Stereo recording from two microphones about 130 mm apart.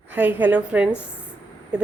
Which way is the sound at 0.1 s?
15° right (ahead or behind).